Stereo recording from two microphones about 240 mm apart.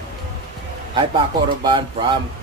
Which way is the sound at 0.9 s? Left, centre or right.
Centre.